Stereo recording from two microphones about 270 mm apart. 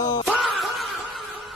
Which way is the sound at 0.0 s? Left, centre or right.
Centre.